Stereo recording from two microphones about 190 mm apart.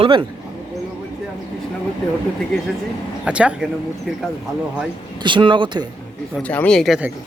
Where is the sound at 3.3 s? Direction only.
5° right (ahead or behind).